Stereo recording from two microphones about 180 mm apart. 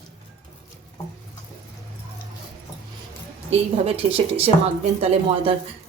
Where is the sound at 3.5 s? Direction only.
35° right (ahead or behind).